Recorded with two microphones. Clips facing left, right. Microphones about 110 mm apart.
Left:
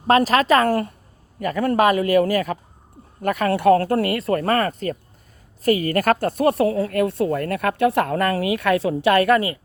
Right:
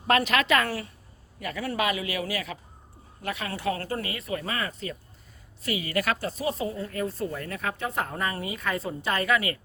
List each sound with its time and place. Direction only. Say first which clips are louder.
0.1 s a woman's voice: left 7 dB; 35° left (ahead or behind); by 9.3 s 70° left (ahead or behind)